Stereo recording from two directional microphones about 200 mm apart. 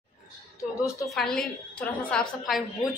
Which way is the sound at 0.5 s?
15° left (ahead or behind).